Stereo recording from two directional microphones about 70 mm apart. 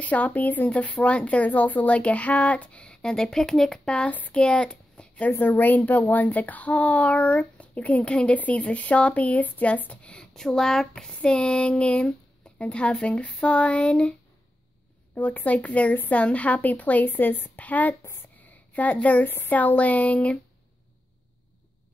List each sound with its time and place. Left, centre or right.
0.0 s a child's voice: left
5.4 s a child's voice: left
12.5 s a sound: centre
15.1 s a child's voice: left